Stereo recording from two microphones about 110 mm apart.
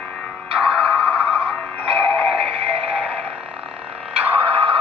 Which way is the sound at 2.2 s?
5° right (ahead or behind).